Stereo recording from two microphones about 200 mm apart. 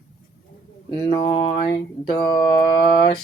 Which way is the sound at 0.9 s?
20° left (ahead or behind).